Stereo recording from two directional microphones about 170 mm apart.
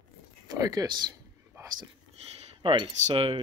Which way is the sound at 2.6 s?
30° right (ahead or behind).